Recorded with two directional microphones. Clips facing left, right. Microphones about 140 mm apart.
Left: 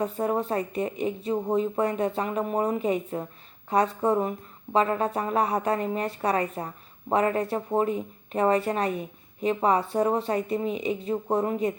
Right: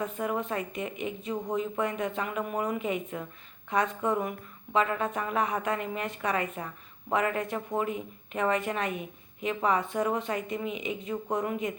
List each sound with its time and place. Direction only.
0.0 s speech: 35° left (ahead or behind)